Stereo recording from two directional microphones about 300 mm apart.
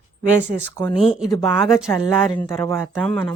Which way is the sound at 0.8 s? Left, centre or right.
Centre.